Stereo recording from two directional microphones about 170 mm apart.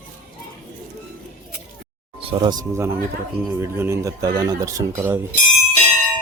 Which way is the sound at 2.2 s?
25° right (ahead or behind).